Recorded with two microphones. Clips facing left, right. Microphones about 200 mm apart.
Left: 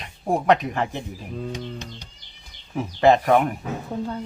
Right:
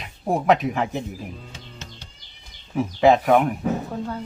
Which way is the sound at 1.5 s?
15° left (ahead or behind).